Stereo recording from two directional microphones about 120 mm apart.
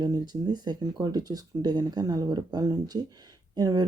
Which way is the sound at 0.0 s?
35° right (ahead or behind).